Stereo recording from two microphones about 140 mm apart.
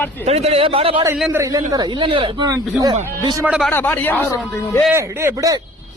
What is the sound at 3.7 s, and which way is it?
Speech, 15° left (ahead or behind).